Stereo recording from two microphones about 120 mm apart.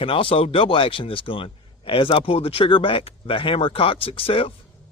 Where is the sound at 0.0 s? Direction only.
50° left (ahead or behind).